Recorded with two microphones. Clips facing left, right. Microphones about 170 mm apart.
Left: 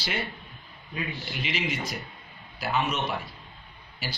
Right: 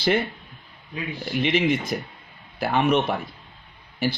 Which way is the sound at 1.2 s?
50° right (ahead or behind).